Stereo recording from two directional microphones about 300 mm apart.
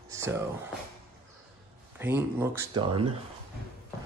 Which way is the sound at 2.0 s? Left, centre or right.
Centre.